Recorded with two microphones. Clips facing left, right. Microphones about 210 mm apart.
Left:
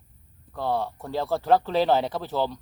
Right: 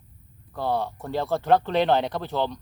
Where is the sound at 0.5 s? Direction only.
Centre (ahead or behind).